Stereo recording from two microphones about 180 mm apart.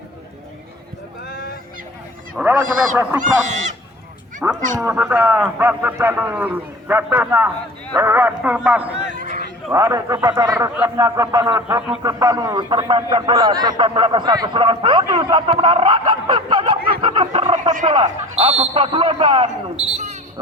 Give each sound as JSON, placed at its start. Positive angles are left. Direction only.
{"t": 2.4, "sound": "a man's voice", "side_deg": -10}
{"t": 3.4, "sound": "speech", "side_deg": -40}
{"t": 4.4, "sound": "a man's voice", "side_deg": -5}
{"t": 8.9, "sound": "a sound", "side_deg": -40}
{"t": 9.7, "sound": "a man's voice", "side_deg": -15}
{"t": 17.6, "sound": "turkey", "side_deg": -40}
{"t": 17.8, "sound": "speech", "side_deg": -30}